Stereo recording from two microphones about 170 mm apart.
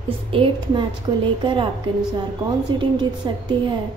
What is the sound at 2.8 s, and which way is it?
Speech, 25° right (ahead or behind).